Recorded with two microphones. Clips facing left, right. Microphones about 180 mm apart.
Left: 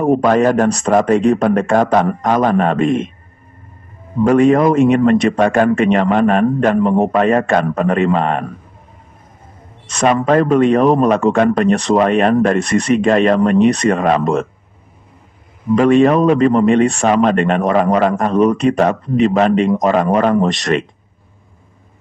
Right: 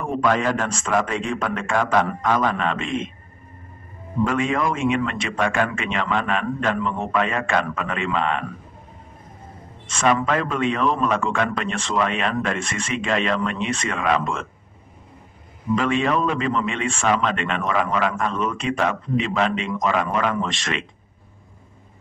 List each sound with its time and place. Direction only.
0.0 s a man's voice: 40° left (ahead or behind)
4.2 s a man's voice: 40° left (ahead or behind)
9.8 s a man's voice: 40° left (ahead or behind)
15.7 s a man's voice: 45° left (ahead or behind)